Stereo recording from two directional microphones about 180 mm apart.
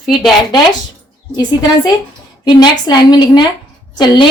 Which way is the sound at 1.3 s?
25° left (ahead or behind).